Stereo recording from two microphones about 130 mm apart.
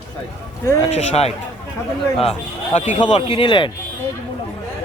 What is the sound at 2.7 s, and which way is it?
Speech, 60° left (ahead or behind).